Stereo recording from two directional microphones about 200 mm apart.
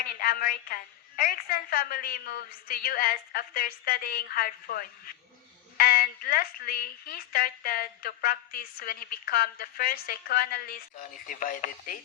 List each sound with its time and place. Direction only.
0.1 s speech: 45° left (ahead or behind)